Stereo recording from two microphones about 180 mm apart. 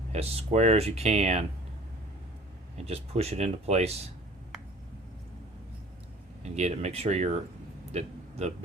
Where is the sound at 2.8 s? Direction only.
35° right (ahead or behind).